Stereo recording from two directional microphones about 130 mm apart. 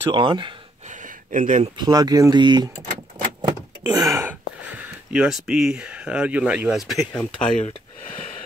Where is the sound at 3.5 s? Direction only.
30° right (ahead or behind).